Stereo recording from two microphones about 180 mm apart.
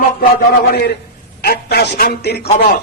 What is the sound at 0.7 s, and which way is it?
A man's voice, 65° left (ahead or behind).